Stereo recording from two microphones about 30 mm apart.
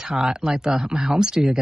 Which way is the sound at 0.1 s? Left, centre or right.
Right.